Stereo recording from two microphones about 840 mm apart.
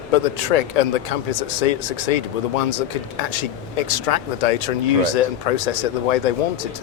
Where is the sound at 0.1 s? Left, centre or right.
Left.